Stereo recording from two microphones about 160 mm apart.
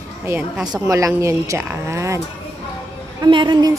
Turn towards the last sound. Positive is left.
turn(degrees=-25)  # may be behind; listen again after turning